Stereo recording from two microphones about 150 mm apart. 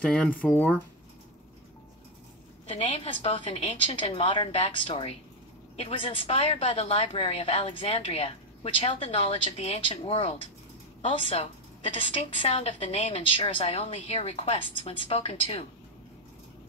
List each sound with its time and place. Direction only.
0.0 s speech: 5° left (ahead or behind)
2.7 s a woman's voice: 40° left (ahead or behind)